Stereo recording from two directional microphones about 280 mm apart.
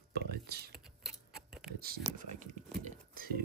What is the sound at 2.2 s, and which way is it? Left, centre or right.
Speech, right.